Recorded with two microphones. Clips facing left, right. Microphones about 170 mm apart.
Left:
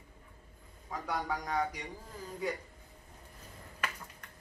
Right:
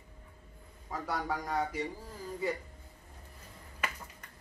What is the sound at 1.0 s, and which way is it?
Speech, 5° right (ahead or behind).